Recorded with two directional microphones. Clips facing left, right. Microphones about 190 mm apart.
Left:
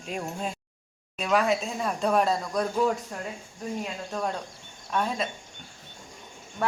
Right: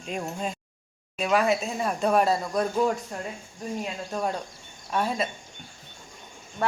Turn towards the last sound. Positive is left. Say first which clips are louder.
# right 1 dB
turn(degrees=0)  # may be behind; listen again after turning